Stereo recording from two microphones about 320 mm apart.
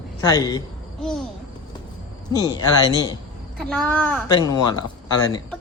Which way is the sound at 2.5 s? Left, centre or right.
Centre.